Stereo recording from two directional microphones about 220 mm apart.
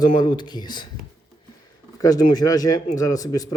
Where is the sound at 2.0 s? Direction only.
15° left (ahead or behind).